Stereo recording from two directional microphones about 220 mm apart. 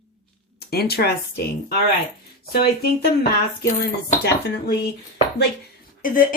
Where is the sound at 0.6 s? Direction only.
45° left (ahead or behind).